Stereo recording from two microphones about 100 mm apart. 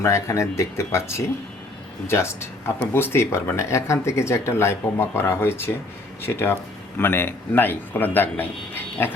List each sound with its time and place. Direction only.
0.0 s a man's voice: 30° left (ahead or behind)